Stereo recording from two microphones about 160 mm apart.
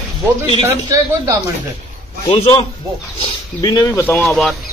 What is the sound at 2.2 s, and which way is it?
Speech, 40° left (ahead or behind).